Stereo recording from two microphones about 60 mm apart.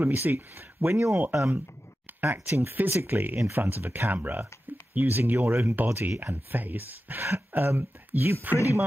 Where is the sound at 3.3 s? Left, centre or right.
Right.